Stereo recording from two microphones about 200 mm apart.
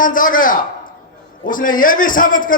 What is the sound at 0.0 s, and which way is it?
A man's voice, 45° left (ahead or behind).